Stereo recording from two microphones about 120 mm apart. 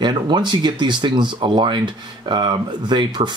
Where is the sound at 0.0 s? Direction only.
40° right (ahead or behind).